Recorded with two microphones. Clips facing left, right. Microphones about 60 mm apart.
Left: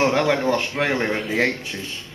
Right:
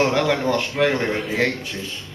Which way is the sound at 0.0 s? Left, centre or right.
Centre.